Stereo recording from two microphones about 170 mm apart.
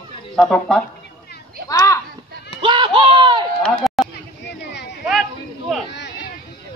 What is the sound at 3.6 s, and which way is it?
Run, centre (ahead or behind).